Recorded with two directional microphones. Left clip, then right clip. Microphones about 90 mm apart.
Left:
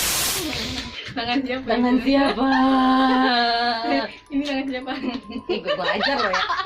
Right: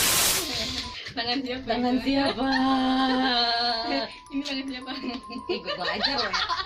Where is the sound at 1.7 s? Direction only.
20° left (ahead or behind).